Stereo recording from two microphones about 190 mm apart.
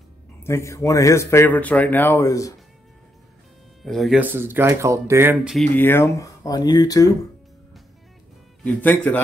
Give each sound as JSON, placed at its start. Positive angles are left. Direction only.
{"t": 0.4, "sound": "speech", "side_deg": 15}
{"t": 3.8, "sound": "speech", "side_deg": 0}
{"t": 5.8, "sound": "speech", "side_deg": 10}
{"t": 8.6, "sound": "speech", "side_deg": 10}